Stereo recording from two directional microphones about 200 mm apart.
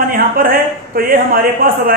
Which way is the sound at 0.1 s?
45° right (ahead or behind).